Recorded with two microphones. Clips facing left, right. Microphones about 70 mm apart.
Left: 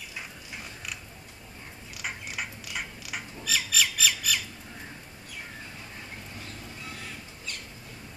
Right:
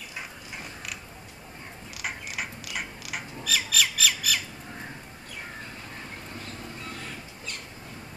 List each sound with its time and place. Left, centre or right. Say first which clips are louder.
2.0 s squawk: right 1 dB; centre